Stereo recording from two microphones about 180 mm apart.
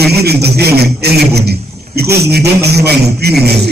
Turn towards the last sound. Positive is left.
turn(degrees=-65)  # may be behind; listen again after turning